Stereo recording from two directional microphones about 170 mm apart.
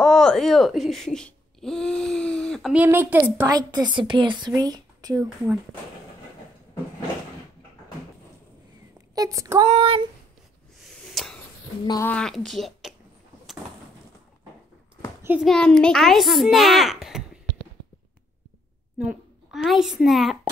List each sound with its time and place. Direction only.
0.0 s a sound: 5° left (ahead or behind)
2.7 s a woman's voice: 10° right (ahead or behind)
3.3 s speech: 20° right (ahead or behind)
9.1 s speech: 20° right (ahead or behind)
9.7 s speech: 30° right (ahead or behind)
10.8 s a sound: centre (ahead or behind)
12.0 s a child's voice: 5° left (ahead or behind)
15.4 s a child's voice: 5° left (ahead or behind)
18.9 s a child's voice: 5° right (ahead or behind)